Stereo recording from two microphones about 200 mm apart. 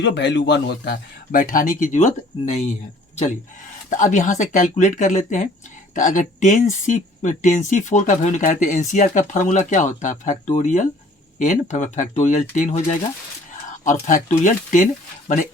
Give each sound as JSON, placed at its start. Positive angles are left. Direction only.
{"t": 0.0, "sound": "speech", "side_deg": 60}
{"t": 3.8, "sound": "speech", "side_deg": 40}